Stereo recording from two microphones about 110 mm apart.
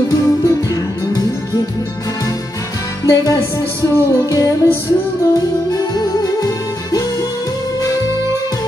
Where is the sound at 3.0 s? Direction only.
35° left (ahead or behind).